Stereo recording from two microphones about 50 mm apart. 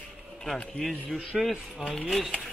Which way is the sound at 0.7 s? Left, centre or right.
Centre.